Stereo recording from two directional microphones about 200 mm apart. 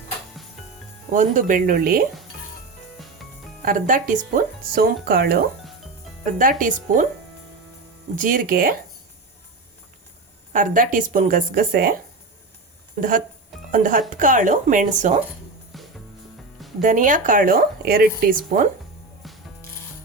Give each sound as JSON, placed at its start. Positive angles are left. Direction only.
{"t": 1.1, "sound": "speech", "side_deg": -40}
{"t": 3.6, "sound": "speech", "side_deg": -40}
{"t": 6.4, "sound": "speech", "side_deg": -40}
{"t": 8.1, "sound": "speech", "side_deg": -40}
{"t": 10.5, "sound": "speech", "side_deg": -40}
{"t": 13.0, "sound": "speech", "side_deg": -40}
{"t": 15.7, "sound": "music", "side_deg": 0}
{"t": 16.8, "sound": "speech", "side_deg": -40}
{"t": 19.2, "sound": "music", "side_deg": 0}